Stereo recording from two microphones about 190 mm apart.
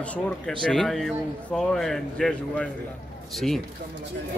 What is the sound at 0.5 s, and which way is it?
Speech, centre (ahead or behind).